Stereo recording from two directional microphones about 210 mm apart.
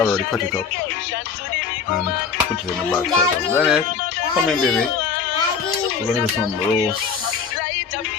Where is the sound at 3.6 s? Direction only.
5° right (ahead or behind).